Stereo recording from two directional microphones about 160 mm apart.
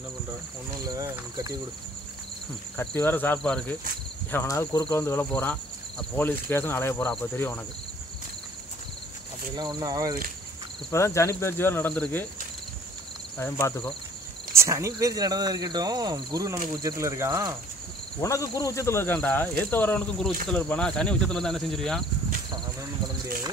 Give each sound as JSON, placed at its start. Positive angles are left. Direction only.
{"t": 0.8, "sound": "speech", "side_deg": -25}
{"t": 2.8, "sound": "speech", "side_deg": 10}
{"t": 9.6, "sound": "speech", "side_deg": -25}
{"t": 10.9, "sound": "speech", "side_deg": 20}
{"t": 13.4, "sound": "speech", "side_deg": 15}
{"t": 14.5, "sound": "speech", "side_deg": -15}
{"t": 18.2, "sound": "speech", "side_deg": 20}
{"t": 22.5, "sound": "cricket", "side_deg": -20}